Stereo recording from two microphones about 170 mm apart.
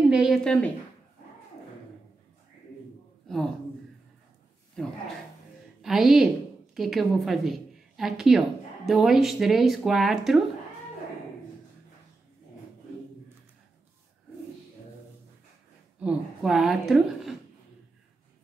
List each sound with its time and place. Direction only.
0.1 s a woman's voice: centre (ahead or behind)
5.8 s a woman's voice: centre (ahead or behind)
16.0 s a woman's voice: 5° right (ahead or behind)